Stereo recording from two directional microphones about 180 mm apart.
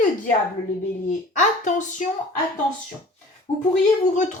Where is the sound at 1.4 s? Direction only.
45° left (ahead or behind).